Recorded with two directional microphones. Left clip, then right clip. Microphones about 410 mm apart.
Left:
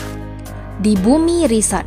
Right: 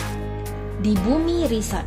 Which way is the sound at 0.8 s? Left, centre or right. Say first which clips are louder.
Left 7 dB; centre.